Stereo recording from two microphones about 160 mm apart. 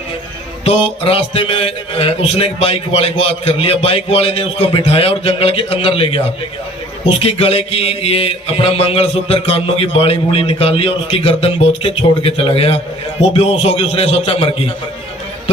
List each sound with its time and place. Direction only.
0.6 s a man's voice: 35° left (ahead or behind)